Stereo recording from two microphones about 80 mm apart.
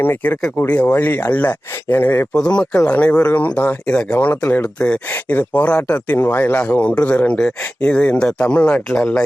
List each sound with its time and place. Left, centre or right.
0.0 s speech: left
2.3 s speech: centre; by 3.8 s left
3.8 s speech: centre